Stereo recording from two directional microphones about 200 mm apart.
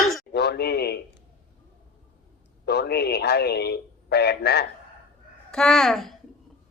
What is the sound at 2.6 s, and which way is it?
Speech, 55° left (ahead or behind).